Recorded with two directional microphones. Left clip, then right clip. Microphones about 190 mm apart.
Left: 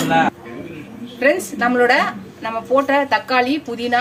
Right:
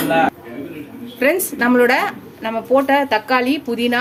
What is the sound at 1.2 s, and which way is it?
A woman's voice, 35° right (ahead or behind).